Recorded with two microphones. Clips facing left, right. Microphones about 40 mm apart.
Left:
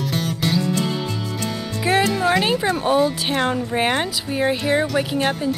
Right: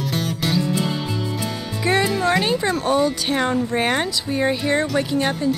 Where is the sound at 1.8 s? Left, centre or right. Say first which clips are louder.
Left 1 dB; centre.